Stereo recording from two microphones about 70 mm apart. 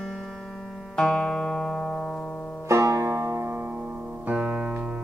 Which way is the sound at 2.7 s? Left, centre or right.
Right.